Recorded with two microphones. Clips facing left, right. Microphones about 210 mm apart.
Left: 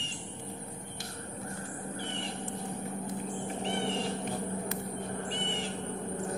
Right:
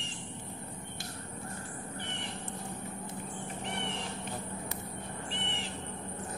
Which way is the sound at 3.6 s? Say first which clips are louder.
Left 6 dB; 30° left (ahead or behind).